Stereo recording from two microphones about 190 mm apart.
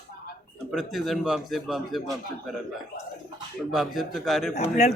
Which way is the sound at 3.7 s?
Centre (ahead or behind).